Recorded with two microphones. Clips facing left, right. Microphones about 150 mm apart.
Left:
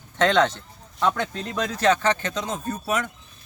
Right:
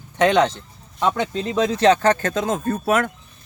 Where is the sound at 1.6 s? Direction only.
30° right (ahead or behind).